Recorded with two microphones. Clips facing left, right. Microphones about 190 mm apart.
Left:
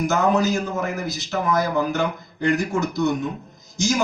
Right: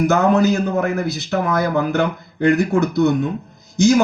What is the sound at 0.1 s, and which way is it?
Speech, 60° right (ahead or behind).